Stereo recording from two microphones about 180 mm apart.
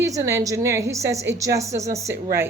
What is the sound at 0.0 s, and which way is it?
A woman's voice, 15° right (ahead or behind).